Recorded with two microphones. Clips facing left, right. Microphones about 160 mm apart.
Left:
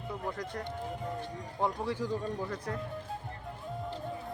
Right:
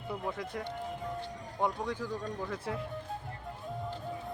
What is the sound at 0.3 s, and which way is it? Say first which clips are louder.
Speech: even; centre (ahead or behind).